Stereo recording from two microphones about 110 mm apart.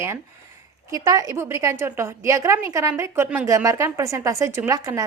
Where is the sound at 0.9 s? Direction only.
30° right (ahead or behind).